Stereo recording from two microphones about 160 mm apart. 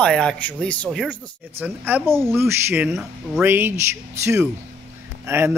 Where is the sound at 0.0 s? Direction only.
5° left (ahead or behind).